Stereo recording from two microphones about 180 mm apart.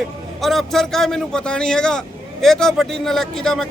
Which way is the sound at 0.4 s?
Centre (ahead or behind).